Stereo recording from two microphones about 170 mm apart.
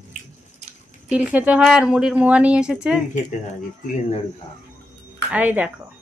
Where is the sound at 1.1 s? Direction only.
5° right (ahead or behind).